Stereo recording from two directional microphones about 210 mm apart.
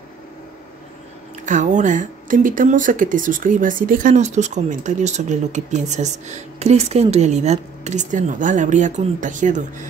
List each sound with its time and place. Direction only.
1.4 s speech: 35° right (ahead or behind)